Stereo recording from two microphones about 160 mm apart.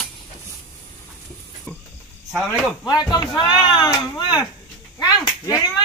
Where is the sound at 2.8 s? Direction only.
25° left (ahead or behind).